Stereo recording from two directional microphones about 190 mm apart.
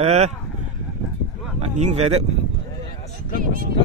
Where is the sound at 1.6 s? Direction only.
35° right (ahead or behind).